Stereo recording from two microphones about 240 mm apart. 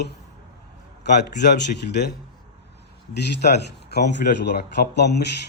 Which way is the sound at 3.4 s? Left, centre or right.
Left.